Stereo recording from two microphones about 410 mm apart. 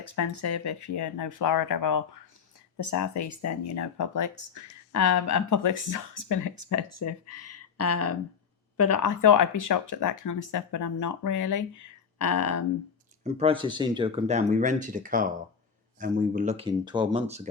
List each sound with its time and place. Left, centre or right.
0.0 s speech: left
13.2 s speech: centre